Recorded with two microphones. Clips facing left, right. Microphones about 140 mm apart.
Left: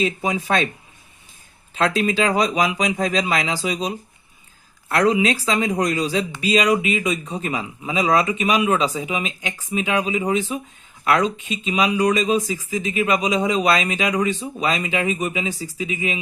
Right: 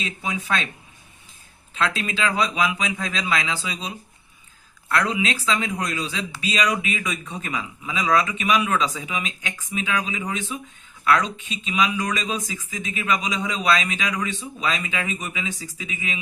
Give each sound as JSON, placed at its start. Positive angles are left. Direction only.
{"t": 0.0, "sound": "speech", "side_deg": 35}
{"t": 1.7, "sound": "speech", "side_deg": 35}
{"t": 11.7, "sound": "speech", "side_deg": 35}